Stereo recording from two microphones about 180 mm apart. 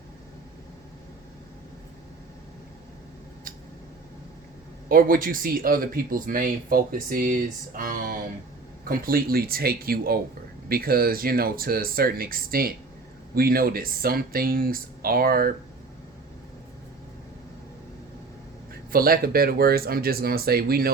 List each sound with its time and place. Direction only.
4.9 s speech: 50° right (ahead or behind)
18.7 s speech: 55° right (ahead or behind)